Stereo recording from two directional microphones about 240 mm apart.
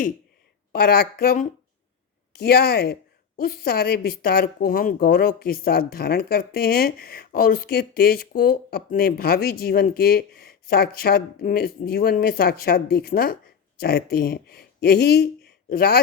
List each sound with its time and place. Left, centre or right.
0.7 s speech: left